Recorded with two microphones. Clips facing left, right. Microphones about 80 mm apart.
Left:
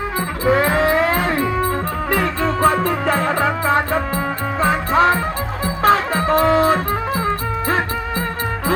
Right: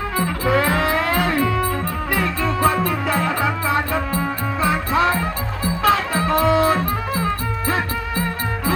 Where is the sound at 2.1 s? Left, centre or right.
Left.